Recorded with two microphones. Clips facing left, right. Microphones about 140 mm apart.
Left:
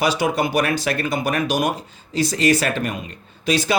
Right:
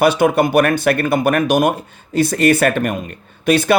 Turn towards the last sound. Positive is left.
turn(degrees=-55)  # may be behind; listen again after turning